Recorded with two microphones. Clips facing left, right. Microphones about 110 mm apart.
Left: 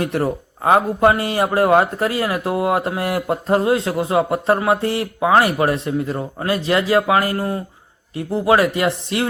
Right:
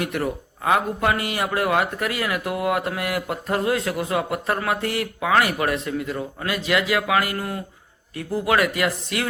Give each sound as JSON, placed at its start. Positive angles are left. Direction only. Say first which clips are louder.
{"t": 0.0, "sound": "a man's voice", "louder": "left 5 dB", "side_deg": 30}